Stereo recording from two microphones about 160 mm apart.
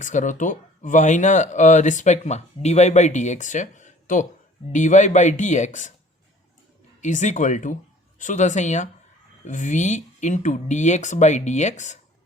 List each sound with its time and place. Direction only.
0.0 s speech: 50° left (ahead or behind)
7.0 s speech: 50° left (ahead or behind)